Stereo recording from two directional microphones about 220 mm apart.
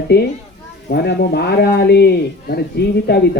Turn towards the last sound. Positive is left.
turn(degrees=45)  # may be behind; listen again after turning